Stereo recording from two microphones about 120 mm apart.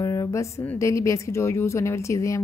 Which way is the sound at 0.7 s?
25° left (ahead or behind).